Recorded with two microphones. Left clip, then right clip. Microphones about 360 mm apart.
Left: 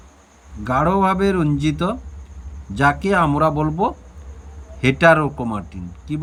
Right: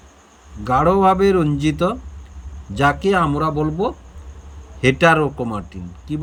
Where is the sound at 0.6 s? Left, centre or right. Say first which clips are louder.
Right 3 dB; centre.